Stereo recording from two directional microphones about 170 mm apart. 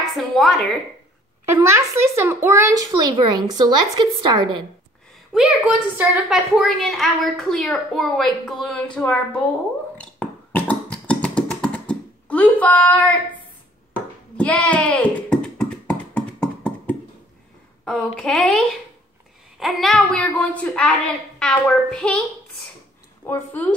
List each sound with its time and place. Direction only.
0.1 s a woman's voice: centre (ahead or behind)
1.5 s speech: 15° right (ahead or behind)
5.3 s a woman's voice: 5° right (ahead or behind)
9.9 s a sound: 10° left (ahead or behind)
14.3 s a sound: 5° left (ahead or behind)
17.8 s a woman's voice: 5° left (ahead or behind)
19.6 s a woman's voice: centre (ahead or behind)
23.2 s speech: 10° left (ahead or behind)